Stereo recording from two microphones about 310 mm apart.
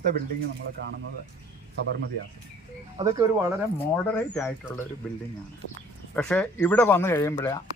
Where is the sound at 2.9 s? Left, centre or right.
Centre.